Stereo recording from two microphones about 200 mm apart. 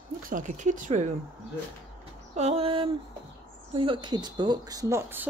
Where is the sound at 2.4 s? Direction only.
30° right (ahead or behind).